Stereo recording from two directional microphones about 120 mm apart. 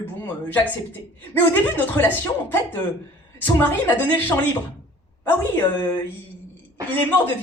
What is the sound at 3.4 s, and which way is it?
A woman's voice, 15° left (ahead or behind).